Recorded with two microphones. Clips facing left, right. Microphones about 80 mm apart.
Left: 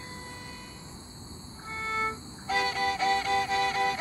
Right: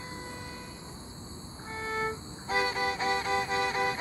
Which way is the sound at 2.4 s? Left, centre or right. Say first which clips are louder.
Left 1 dB; right.